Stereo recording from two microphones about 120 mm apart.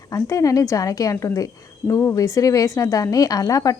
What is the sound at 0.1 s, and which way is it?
A woman's voice, 30° left (ahead or behind).